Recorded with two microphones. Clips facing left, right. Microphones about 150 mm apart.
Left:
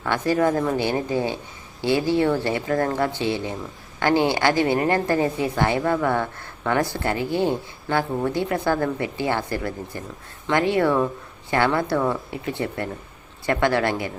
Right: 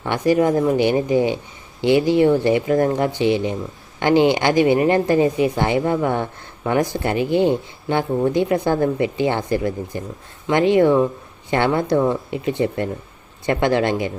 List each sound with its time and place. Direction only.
0.0 s speech: 15° right (ahead or behind)